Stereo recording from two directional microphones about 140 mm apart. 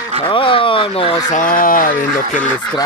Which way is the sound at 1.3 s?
70° left (ahead or behind).